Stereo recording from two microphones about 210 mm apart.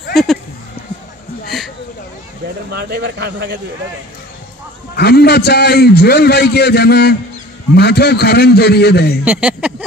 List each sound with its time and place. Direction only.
0.1 s a sound: centre (ahead or behind)
2.7 s speech: 50° right (ahead or behind)
4.9 s a man's voice: 50° left (ahead or behind)
9.2 s speech: 5° right (ahead or behind)